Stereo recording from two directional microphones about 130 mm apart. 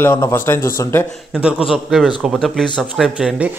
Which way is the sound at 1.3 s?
5° right (ahead or behind).